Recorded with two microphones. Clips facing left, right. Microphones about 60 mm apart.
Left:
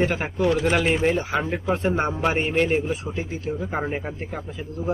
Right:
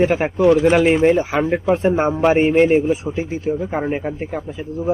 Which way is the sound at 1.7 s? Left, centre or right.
Centre.